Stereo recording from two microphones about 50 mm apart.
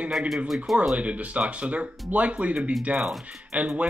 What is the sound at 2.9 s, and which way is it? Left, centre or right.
Speech, centre.